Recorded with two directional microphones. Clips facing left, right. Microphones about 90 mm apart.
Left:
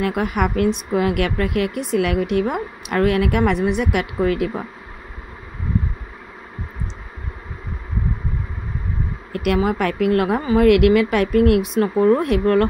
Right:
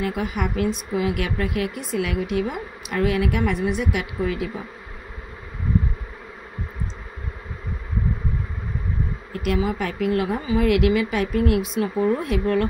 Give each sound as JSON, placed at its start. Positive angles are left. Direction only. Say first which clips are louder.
{"t": 0.0, "sound": "speech", "louder": "left 5 dB", "side_deg": 55}
{"t": 9.3, "sound": "speech", "louder": "left 5 dB", "side_deg": 60}